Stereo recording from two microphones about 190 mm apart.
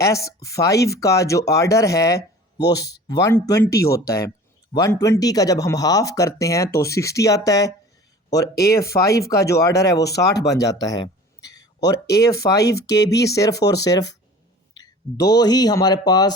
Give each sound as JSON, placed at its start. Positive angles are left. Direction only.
{"t": 0.0, "sound": "speech", "side_deg": 15}
{"t": 10.6, "sound": "a sound", "side_deg": 20}
{"t": 12.1, "sound": "speech", "side_deg": 15}